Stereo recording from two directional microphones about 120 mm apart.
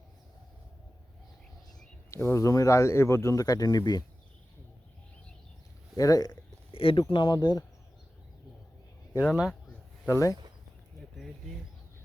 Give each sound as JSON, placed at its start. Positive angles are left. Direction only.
{"t": 2.0, "sound": "speech", "side_deg": 25}
{"t": 6.0, "sound": "speech", "side_deg": 30}
{"t": 6.7, "sound": "speech", "side_deg": 50}
{"t": 9.2, "sound": "speech", "side_deg": 0}
{"t": 10.1, "sound": "speech", "side_deg": 30}